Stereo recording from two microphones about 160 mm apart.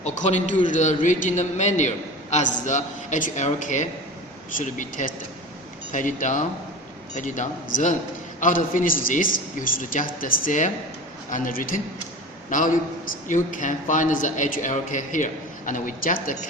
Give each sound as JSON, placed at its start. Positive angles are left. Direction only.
{"t": 0.0, "sound": "a man's voice", "side_deg": 50}